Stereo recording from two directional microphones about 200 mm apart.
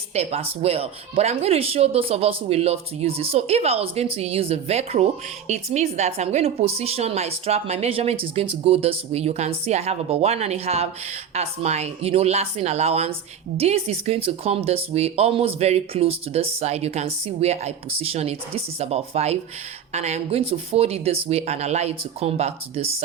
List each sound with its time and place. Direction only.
0.1 s speech: 35° right (ahead or behind)